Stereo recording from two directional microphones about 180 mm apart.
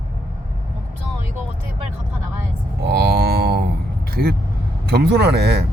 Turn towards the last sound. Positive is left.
turn(degrees=-65)  # may be behind; listen again after turning